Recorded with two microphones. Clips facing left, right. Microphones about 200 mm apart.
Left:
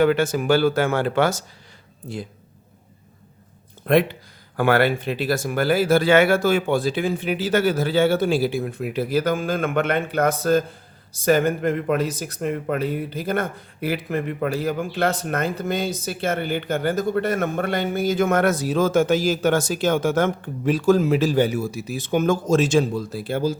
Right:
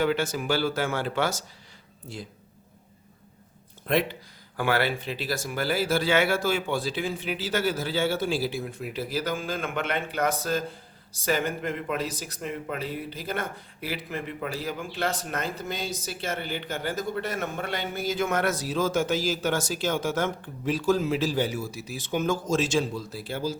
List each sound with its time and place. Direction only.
0.0 s speech: 55° left (ahead or behind)
3.8 s speech: 55° left (ahead or behind)